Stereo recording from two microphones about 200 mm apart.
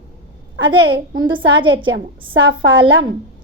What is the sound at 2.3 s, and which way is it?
Speech, 75° right (ahead or behind).